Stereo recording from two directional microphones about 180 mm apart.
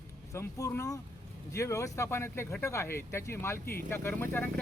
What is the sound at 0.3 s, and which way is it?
Speech, 15° left (ahead or behind).